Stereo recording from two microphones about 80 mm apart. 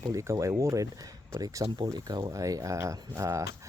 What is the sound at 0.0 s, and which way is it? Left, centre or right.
Speech, right.